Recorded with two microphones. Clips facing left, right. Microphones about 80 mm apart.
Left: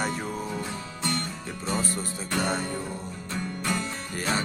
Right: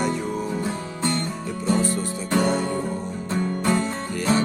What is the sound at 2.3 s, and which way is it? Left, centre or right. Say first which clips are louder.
Music: right 6 dB; right.